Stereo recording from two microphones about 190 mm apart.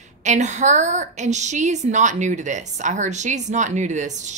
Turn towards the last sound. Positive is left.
turn(degrees=-40)  # may be behind; listen again after turning